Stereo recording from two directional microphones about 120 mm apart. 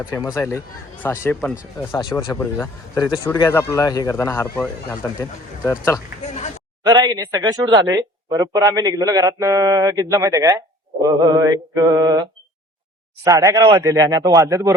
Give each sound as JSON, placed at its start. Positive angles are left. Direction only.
{"t": 0.3, "sound": "speech", "side_deg": 25}
{"t": 2.0, "sound": "speech", "side_deg": 30}
{"t": 6.2, "sound": "a sound", "side_deg": 70}
{"t": 6.8, "sound": "a man's voice", "side_deg": -35}